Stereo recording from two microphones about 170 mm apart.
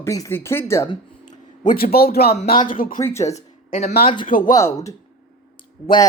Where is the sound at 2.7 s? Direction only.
55° left (ahead or behind).